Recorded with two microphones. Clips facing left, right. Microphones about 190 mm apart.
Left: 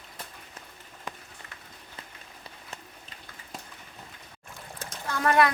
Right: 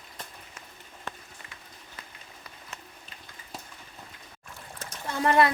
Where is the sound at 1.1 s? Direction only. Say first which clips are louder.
Even; 15° left (ahead or behind).